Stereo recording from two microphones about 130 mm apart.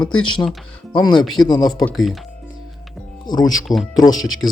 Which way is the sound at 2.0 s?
Centre (ahead or behind).